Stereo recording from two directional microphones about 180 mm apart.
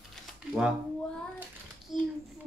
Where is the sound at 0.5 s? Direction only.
5° right (ahead or behind).